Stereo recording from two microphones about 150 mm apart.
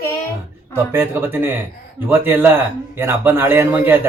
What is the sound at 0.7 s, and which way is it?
A man's voice, 15° right (ahead or behind).